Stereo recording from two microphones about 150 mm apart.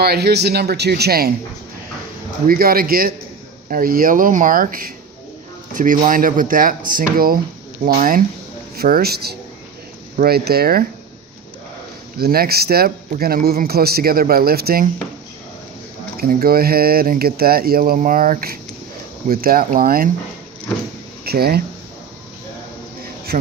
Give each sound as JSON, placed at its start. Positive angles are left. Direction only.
{"t": 0.0, "sound": "a man's voice", "side_deg": -90}
{"t": 2.5, "sound": "speech", "side_deg": -80}
{"t": 3.7, "sound": "speech", "side_deg": -70}
{"t": 8.7, "sound": "a man's voice", "side_deg": -90}
{"t": 12.1, "sound": "a man's voice", "side_deg": -90}
{"t": 16.1, "sound": "a man's voice", "side_deg": -80}
{"t": 21.2, "sound": "speech", "side_deg": -90}